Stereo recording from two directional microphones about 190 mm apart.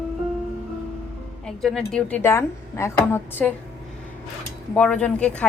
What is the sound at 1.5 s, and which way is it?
Speech, centre (ahead or behind).